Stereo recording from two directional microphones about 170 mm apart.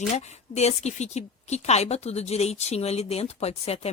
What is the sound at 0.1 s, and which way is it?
A woman's voice, 40° left (ahead or behind).